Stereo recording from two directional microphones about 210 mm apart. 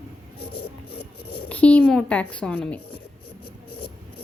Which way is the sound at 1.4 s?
5° left (ahead or behind).